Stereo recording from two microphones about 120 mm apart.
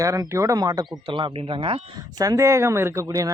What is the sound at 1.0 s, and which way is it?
Speech, 45° right (ahead or behind).